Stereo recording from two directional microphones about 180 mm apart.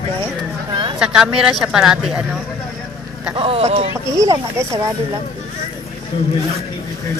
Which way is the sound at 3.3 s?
30° right (ahead or behind).